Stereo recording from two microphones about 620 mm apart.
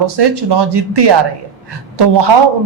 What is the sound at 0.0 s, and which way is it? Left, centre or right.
A man's voice, right.